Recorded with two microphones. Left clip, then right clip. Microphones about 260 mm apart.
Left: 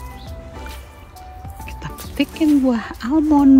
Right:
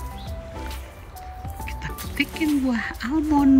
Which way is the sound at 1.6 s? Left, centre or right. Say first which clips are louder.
Left 1 dB; centre.